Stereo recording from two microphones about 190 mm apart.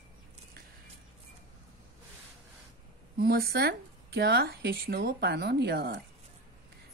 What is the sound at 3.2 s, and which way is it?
Speech, 55° right (ahead or behind).